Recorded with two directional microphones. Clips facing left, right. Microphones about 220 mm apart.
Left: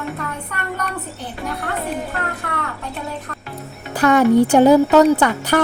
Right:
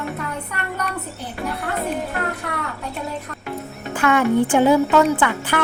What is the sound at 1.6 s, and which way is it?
Speech, centre (ahead or behind).